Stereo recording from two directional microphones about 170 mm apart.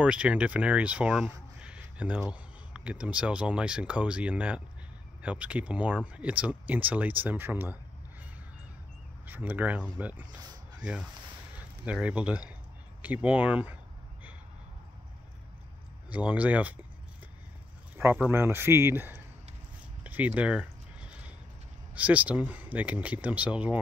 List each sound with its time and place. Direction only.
0.0 s speech: 5° right (ahead or behind)
9.2 s speech: 10° right (ahead or behind)
10.4 s a sound: 25° right (ahead or behind)
11.8 s speech: 5° right (ahead or behind)
16.1 s speech: 10° right (ahead or behind)
17.9 s speech: 10° right (ahead or behind)
20.0 s a sound: 10° right (ahead or behind)
21.9 s speech: 10° right (ahead or behind)